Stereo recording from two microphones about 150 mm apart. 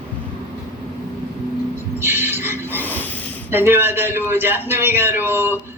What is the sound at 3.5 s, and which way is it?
A man's voice, 15° right (ahead or behind).